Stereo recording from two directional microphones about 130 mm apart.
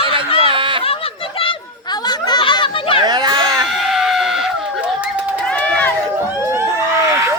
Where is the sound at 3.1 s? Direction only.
35° right (ahead or behind).